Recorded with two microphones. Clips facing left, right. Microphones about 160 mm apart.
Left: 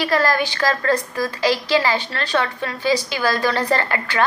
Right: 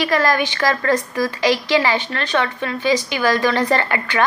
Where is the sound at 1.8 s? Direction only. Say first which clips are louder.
Right 1 dB; 40° left (ahead or behind).